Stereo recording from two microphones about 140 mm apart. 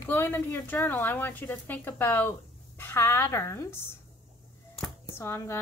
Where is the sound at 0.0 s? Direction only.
15° left (ahead or behind).